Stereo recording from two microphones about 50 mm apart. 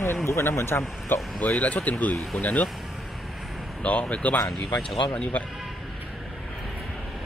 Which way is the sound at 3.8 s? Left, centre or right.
Left.